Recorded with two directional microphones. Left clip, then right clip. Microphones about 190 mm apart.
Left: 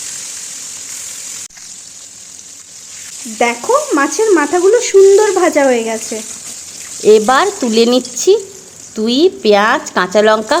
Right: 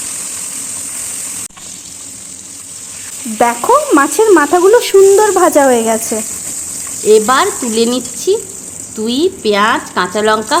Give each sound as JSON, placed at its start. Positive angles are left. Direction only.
{"t": 3.3, "sound": "speech", "side_deg": -25}
{"t": 7.1, "sound": "speech", "side_deg": 15}